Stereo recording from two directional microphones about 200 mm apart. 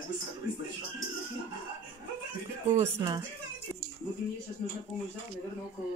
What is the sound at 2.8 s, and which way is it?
Speech, 15° right (ahead or behind).